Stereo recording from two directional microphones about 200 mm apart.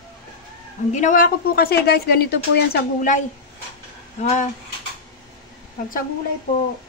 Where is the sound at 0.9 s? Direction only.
40° left (ahead or behind).